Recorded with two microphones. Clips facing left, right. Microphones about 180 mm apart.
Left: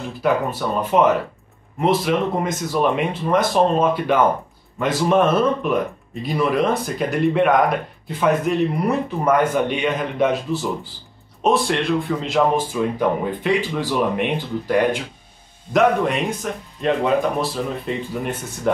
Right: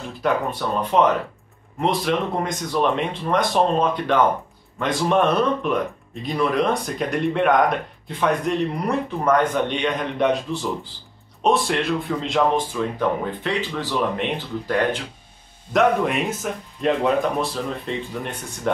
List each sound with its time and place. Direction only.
0.2 s speech: 5° left (ahead or behind)
15.7 s speech: centre (ahead or behind)